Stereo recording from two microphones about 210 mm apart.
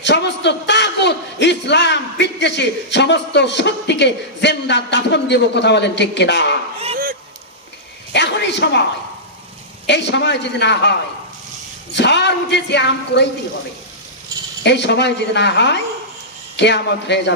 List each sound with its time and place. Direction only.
0.0 s a man's voice: 55° left (ahead or behind)
6.7 s honk: 30° right (ahead or behind)
8.1 s a man's voice: 55° left (ahead or behind)
9.8 s speech: 55° left (ahead or behind)
11.9 s speech: 55° left (ahead or behind)
14.6 s speech: 55° left (ahead or behind)